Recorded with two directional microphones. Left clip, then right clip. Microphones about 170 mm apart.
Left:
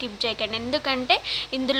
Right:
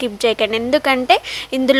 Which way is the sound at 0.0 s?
45° right (ahead or behind).